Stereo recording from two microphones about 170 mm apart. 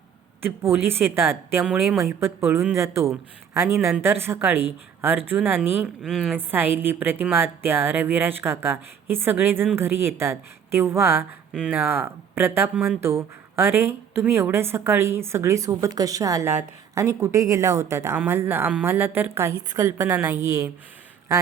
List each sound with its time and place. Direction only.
0.4 s a woman's voice: 15° right (ahead or behind)